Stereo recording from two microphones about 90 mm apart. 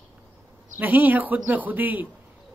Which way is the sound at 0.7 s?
20° right (ahead or behind).